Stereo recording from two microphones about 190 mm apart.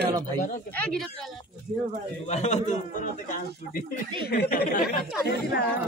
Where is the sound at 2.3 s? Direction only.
35° left (ahead or behind).